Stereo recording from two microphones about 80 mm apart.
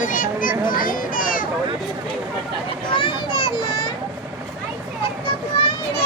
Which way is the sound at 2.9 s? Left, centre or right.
Left.